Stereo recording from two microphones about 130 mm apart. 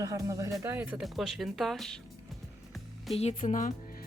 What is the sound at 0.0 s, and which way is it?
Speech, 25° right (ahead or behind).